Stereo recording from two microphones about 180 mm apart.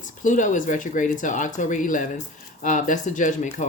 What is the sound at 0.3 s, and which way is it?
Speech, 45° left (ahead or behind).